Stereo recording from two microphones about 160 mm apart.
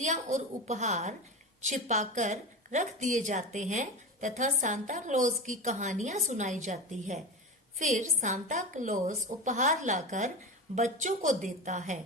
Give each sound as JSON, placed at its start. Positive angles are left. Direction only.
{"t": 0.0, "sound": "a woman's voice", "side_deg": -50}